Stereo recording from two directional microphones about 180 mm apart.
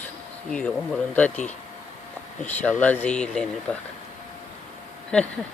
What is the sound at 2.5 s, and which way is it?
Speech, 10° left (ahead or behind).